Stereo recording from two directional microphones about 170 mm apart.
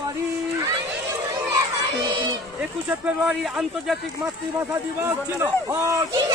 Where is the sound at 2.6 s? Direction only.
5° right (ahead or behind).